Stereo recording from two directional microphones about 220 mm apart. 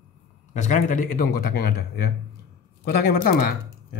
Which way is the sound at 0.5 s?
35° left (ahead or behind).